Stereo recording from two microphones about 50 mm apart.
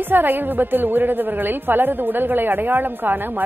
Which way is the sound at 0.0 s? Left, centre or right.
Right.